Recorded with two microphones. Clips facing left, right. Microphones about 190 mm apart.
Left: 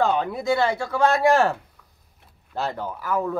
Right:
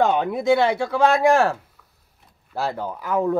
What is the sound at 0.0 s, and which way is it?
A man's voice, 20° right (ahead or behind).